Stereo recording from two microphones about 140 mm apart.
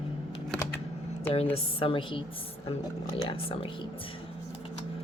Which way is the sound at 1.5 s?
40° left (ahead or behind).